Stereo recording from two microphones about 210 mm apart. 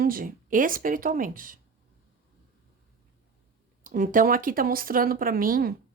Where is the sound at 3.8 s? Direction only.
40° right (ahead or behind).